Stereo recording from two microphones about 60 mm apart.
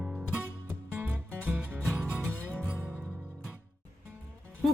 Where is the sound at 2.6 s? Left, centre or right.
Right.